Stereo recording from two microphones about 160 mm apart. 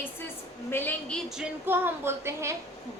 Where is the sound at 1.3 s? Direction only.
10° right (ahead or behind).